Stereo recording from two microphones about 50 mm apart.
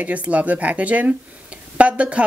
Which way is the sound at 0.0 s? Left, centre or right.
Right.